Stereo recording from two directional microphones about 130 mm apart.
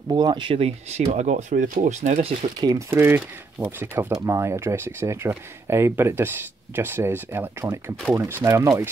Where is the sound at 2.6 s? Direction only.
30° right (ahead or behind).